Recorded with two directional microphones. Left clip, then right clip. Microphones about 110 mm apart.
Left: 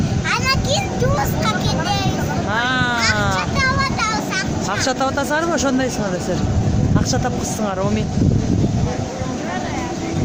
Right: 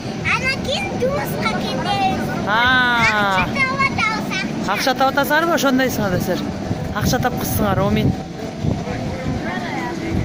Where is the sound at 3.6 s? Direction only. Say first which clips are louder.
Right 1 dB; 50° left (ahead or behind).